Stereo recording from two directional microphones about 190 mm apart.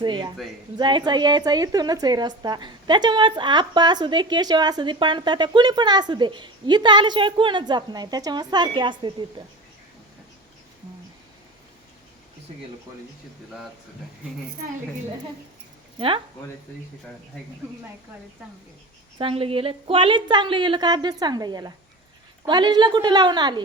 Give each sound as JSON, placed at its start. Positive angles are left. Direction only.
{"t": 0.0, "sound": "a woman's voice", "side_deg": -25}
{"t": 16.0, "sound": "speech", "side_deg": -30}
{"t": 19.2, "sound": "a woman's voice", "side_deg": -30}